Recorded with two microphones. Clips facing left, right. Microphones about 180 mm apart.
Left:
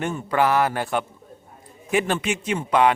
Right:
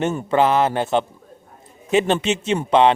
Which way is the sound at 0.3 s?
20° right (ahead or behind).